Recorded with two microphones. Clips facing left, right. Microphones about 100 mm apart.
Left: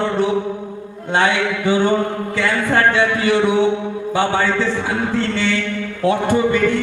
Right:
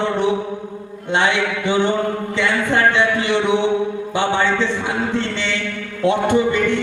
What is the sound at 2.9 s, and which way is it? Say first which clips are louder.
Music: left 1 dB; 20° right (ahead or behind).